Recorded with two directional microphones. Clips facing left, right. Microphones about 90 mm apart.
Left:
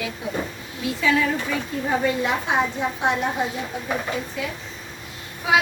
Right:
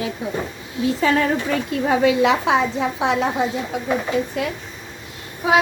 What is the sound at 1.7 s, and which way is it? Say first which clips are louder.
Speech: right 6 dB; 90° right.